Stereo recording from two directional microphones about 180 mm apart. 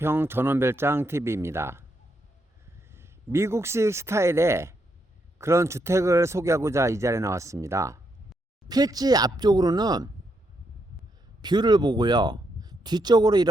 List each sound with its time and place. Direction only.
0.0 s speech: 10° right (ahead or behind)
2.9 s speech: 15° right (ahead or behind)
11.4 s speech: 25° right (ahead or behind)